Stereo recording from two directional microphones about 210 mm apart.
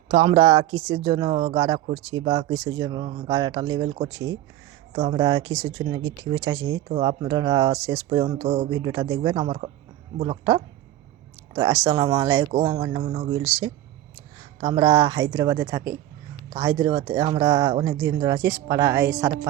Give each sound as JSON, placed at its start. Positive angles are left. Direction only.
{"t": 0.1, "sound": "speech", "side_deg": -30}
{"t": 2.5, "sound": "speech", "side_deg": -70}
{"t": 2.8, "sound": "speech", "side_deg": -20}
{"t": 4.1, "sound": "speech", "side_deg": -65}
{"t": 4.9, "sound": "speech", "side_deg": -20}
{"t": 6.0, "sound": "speech", "side_deg": -60}
{"t": 6.8, "sound": "speech", "side_deg": -25}
{"t": 14.6, "sound": "speech", "side_deg": -25}